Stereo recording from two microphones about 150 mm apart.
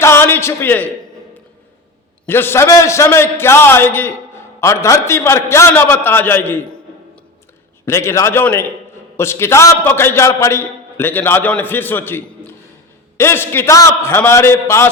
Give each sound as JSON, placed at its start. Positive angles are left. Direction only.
{"t": 0.0, "sound": "a sound", "side_deg": 15}
{"t": 2.2, "sound": "a man's voice", "side_deg": 15}
{"t": 7.9, "sound": "a man's voice", "side_deg": 20}